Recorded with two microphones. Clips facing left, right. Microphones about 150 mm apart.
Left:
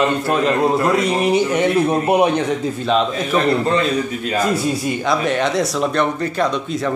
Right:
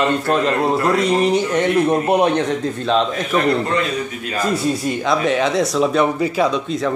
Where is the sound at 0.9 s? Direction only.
5° left (ahead or behind).